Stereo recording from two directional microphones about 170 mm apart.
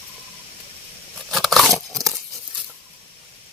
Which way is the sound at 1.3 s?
Centre (ahead or behind).